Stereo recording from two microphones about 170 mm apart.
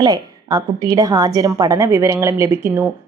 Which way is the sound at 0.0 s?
25° right (ahead or behind).